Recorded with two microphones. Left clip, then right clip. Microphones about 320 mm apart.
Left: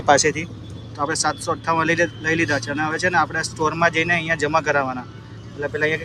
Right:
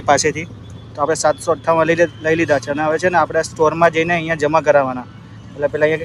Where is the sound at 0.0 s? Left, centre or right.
Centre.